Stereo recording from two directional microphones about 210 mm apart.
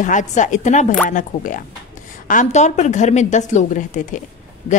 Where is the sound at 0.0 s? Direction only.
35° left (ahead or behind).